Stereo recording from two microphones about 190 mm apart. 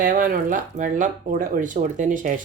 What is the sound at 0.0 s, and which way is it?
Speech, 45° right (ahead or behind).